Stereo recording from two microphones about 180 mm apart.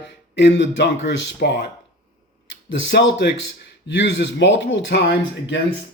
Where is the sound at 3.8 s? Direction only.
85° left.